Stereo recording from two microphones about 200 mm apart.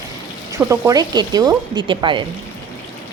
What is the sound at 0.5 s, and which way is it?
A woman's voice, 15° right (ahead or behind).